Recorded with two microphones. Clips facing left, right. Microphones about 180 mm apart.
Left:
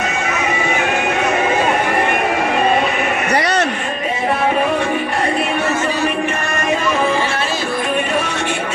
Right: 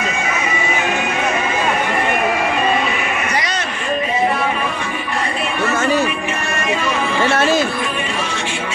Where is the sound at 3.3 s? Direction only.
65° left (ahead or behind).